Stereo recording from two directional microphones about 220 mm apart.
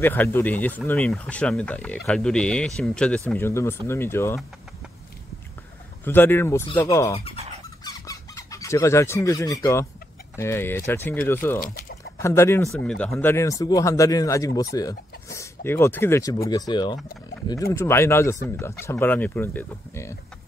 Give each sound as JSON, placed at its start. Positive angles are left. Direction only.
{"t": 0.0, "sound": "speech", "side_deg": 10}
{"t": 6.0, "sound": "speech", "side_deg": 10}
{"t": 7.8, "sound": "a sound", "side_deg": 15}
{"t": 10.3, "sound": "speech", "side_deg": 10}
{"t": 11.6, "sound": "a sound", "side_deg": 40}
{"t": 12.2, "sound": "speech", "side_deg": 10}